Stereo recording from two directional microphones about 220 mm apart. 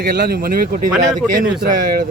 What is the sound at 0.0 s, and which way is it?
Speech, 40° right (ahead or behind).